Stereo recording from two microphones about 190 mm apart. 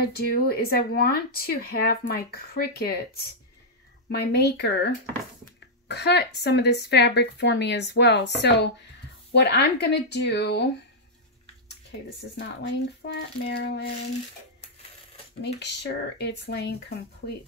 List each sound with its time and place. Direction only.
0.0 s speech: 55° left (ahead or behind)
4.1 s a woman's voice: 60° left (ahead or behind)
12.6 s a woman's voice: 65° left (ahead or behind)
15.4 s a woman's voice: 65° left (ahead or behind)